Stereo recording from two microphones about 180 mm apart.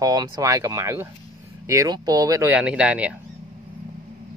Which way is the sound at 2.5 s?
5° right (ahead or behind).